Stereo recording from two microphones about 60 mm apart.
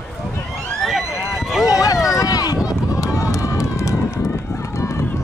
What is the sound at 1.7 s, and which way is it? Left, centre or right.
Run, left.